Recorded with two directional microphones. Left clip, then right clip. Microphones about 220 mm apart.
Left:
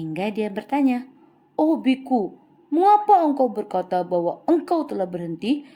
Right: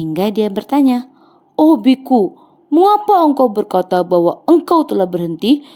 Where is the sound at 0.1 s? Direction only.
35° right (ahead or behind).